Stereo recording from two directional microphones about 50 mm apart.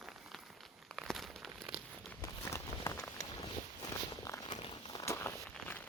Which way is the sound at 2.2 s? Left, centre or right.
Left.